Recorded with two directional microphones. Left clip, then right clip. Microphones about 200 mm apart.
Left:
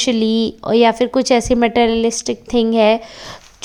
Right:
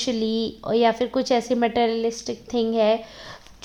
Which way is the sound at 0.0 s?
30° left (ahead or behind).